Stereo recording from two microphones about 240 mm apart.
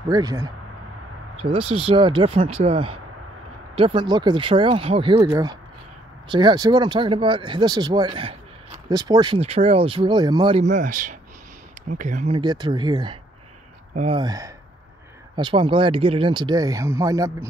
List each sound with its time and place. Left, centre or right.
0.1 s speech: centre; by 12.4 s right
12.4 s speech: centre